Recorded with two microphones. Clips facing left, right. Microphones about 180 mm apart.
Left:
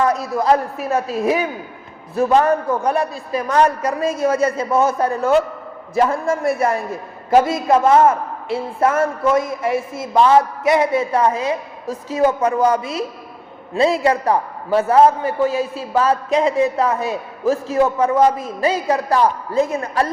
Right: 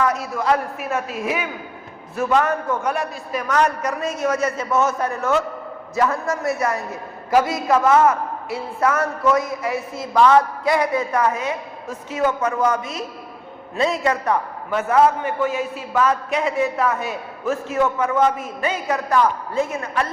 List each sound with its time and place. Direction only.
0.0 s a man's voice: 35° left (ahead or behind)